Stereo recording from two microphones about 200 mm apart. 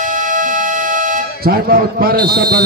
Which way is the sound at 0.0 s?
40° right (ahead or behind).